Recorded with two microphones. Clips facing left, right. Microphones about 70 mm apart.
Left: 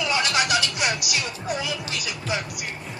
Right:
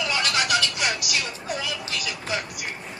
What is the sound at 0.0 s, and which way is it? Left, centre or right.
Music, left.